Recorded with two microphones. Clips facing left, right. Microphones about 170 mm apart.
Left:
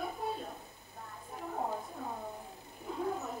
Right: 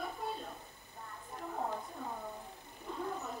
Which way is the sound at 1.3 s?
10° left (ahead or behind).